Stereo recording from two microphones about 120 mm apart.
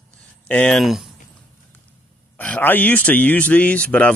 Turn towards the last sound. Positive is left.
turn(degrees=10)  # may be behind; listen again after turning